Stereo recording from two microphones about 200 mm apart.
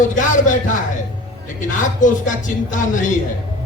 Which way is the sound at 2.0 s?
40° left (ahead or behind).